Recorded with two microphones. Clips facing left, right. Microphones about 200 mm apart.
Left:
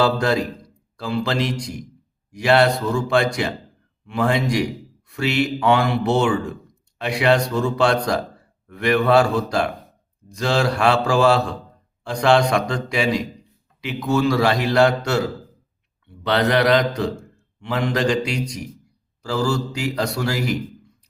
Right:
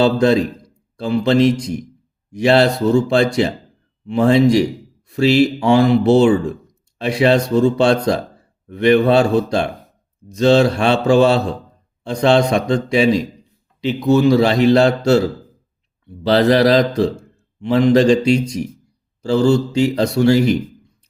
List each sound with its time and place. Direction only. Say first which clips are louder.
0.0 s a man's voice: right 5 dB; 25° right (ahead or behind)